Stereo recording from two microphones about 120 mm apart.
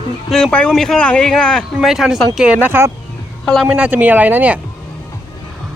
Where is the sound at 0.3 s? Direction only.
5° left (ahead or behind).